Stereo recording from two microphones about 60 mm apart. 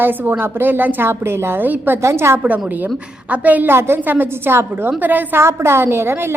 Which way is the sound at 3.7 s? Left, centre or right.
Right.